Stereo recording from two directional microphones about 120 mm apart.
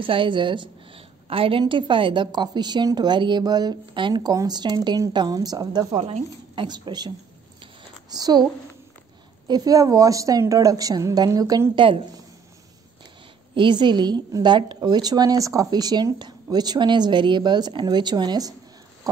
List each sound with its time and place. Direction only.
0.0 s a woman's voice: 45° right (ahead or behind)
9.5 s a woman's voice: 30° right (ahead or behind)
11.7 s a woman's voice: 45° right (ahead or behind)
13.6 s a woman's voice: 40° right (ahead or behind)